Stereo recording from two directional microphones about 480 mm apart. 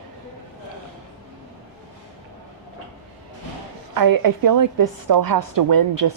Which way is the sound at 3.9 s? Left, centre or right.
Right.